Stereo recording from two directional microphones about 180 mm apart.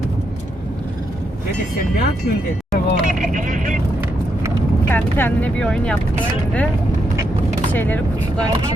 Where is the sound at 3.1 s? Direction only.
45° right (ahead or behind).